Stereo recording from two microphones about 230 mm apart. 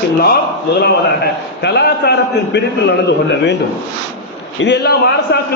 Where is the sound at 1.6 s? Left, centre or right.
Left.